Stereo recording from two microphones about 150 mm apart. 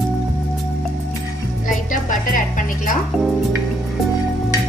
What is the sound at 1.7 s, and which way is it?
Music, 60° left (ahead or behind).